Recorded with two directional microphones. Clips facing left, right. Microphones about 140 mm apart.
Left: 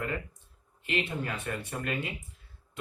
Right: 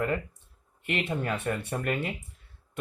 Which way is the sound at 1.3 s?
60° right (ahead or behind).